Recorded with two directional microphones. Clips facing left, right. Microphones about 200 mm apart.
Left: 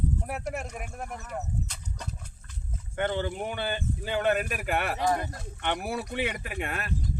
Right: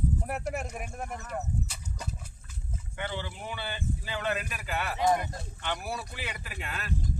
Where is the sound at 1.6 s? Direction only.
5° right (ahead or behind).